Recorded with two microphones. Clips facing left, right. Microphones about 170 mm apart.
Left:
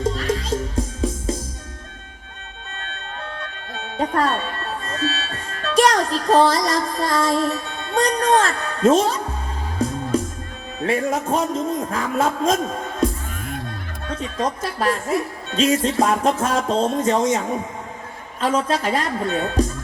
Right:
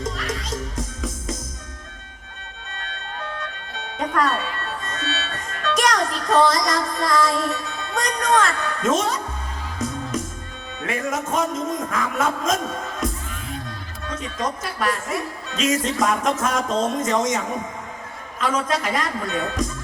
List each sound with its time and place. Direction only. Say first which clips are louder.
0.0 s music: left 6 dB; 30° left (ahead or behind)
3.9 s music: left 2 dB; 30° left (ahead or behind)
10.8 s a woman's voice: left 5 dB; 30° left (ahead or behind)
13.0 s music: left 7 dB; 30° left (ahead or behind)
14.1 s a woman's voice: left 3 dB; 30° left (ahead or behind)